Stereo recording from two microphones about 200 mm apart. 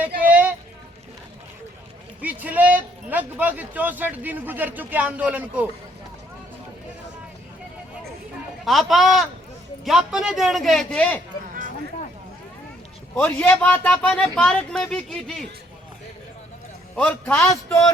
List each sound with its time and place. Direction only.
0.2 s a sound: 10° right (ahead or behind)
2.2 s speech: 10° right (ahead or behind)
8.6 s a man's voice: centre (ahead or behind)
13.1 s a man's voice: 10° left (ahead or behind)
16.9 s a man's voice: 10° left (ahead or behind)